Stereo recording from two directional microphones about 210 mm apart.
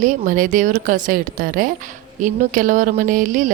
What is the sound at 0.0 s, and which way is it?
A woman's voice, 40° right (ahead or behind).